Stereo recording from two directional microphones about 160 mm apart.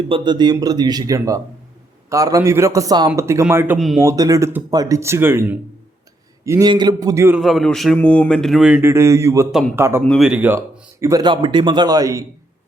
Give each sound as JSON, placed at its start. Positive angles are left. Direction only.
{"t": 0.1, "sound": "speech", "side_deg": -25}
{"t": 7.3, "sound": "a man's voice", "side_deg": 0}
{"t": 9.5, "sound": "a man's voice", "side_deg": 0}
{"t": 9.7, "sound": "speech", "side_deg": -15}
{"t": 10.0, "sound": "a man's voice", "side_deg": 0}
{"t": 11.0, "sound": "speech", "side_deg": -25}